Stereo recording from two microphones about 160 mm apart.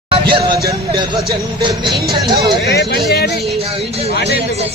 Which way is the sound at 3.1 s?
90° left.